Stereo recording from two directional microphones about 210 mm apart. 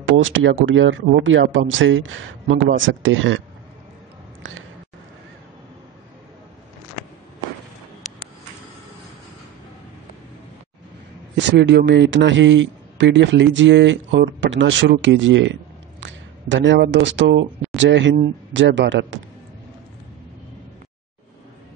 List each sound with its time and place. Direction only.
0.2 s a man's voice: 65° right (ahead or behind)
4.4 s a sound: 65° right (ahead or behind)
11.3 s a man's voice: 55° right (ahead or behind)